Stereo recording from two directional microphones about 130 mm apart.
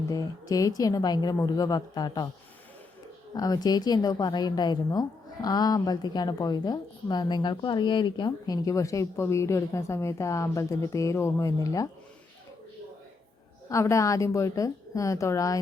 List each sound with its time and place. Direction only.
0.1 s a woman's voice: 30° left (ahead or behind)
3.3 s a woman's voice: 30° left (ahead or behind)
13.7 s a woman's voice: 25° left (ahead or behind)